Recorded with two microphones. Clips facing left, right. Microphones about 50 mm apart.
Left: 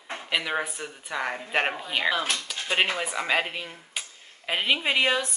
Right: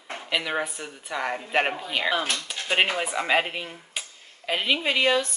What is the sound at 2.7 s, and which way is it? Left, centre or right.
Speech, centre.